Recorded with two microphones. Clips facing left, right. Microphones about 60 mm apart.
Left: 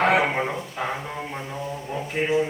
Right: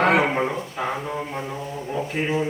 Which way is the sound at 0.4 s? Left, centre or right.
Centre.